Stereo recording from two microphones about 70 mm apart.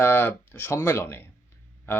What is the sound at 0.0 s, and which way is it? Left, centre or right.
Speech, left.